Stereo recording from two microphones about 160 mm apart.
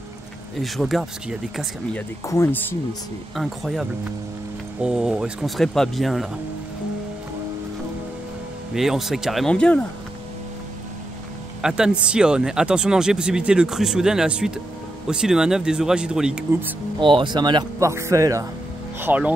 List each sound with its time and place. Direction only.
0.6 s speech: centre (ahead or behind)
2.2 s speech: 15° left (ahead or behind)
3.3 s speech: centre (ahead or behind)
4.8 s speech: 5° right (ahead or behind)
8.7 s speech: centre (ahead or behind)
11.6 s speech: 5° right (ahead or behind)
17.0 s speech: 30° right (ahead or behind); by 19.3 s 10° right (ahead or behind)